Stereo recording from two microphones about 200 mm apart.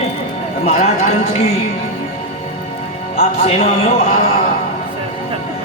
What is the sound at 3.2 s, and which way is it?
Speech, 30° left (ahead or behind).